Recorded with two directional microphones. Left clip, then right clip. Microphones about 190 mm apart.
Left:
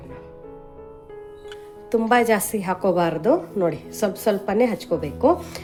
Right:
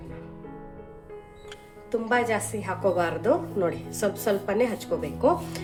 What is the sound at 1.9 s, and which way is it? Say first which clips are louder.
Speech: left 7 dB; 50° left (ahead or behind).